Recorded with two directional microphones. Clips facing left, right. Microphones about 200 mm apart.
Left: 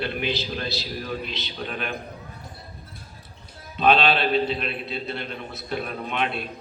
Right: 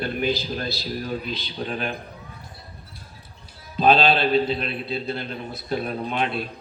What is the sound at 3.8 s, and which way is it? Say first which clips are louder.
A man's voice: right 2 dB; 30° right (ahead or behind).